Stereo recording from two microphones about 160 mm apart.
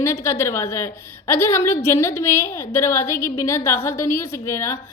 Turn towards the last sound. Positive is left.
turn(degrees=20)  # may be behind; listen again after turning